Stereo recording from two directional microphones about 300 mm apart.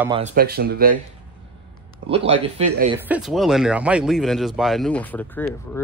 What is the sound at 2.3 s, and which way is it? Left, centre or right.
Speech, right.